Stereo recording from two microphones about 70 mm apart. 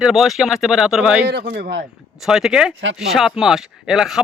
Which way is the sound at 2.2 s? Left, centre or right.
Centre.